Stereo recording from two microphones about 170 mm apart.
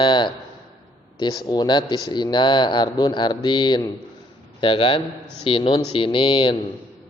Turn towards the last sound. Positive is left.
turn(degrees=30)  # may be behind; listen again after turning